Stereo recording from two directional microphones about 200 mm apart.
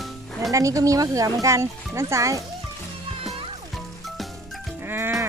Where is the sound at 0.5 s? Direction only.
15° right (ahead or behind).